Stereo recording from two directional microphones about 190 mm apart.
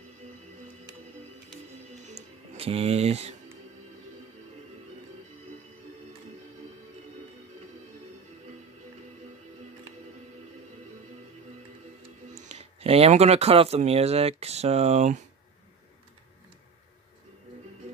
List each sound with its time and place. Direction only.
2.0 s music: 35° right (ahead or behind)
12.4 s speech: 35° right (ahead or behind)